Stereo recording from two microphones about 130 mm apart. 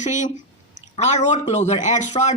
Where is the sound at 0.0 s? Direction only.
70° left (ahead or behind).